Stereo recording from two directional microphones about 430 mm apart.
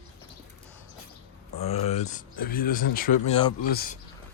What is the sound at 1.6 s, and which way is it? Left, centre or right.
Speech, centre.